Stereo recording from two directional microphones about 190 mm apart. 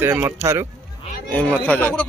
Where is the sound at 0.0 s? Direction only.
10° right (ahead or behind).